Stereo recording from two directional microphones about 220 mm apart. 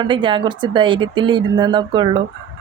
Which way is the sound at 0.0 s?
20° right (ahead or behind).